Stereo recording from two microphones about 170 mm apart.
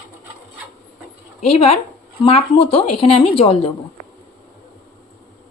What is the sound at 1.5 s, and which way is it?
A woman's voice, 35° left (ahead or behind).